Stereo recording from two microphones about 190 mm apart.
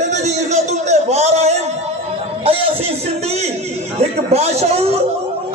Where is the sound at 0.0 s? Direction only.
35° right (ahead or behind).